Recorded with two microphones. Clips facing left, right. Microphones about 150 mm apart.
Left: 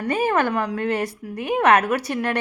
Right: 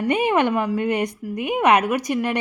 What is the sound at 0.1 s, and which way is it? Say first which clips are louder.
A woman's voice: right 1 dB; 20° right (ahead or behind).